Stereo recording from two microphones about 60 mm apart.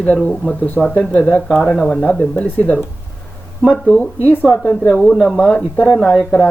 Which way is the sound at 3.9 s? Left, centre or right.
Centre.